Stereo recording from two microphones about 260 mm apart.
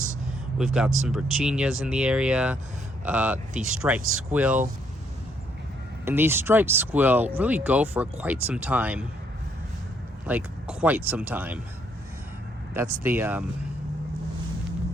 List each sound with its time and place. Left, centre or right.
0.6 s speech: centre
6.1 s speech: centre
10.2 s speech: centre
12.7 s speech: centre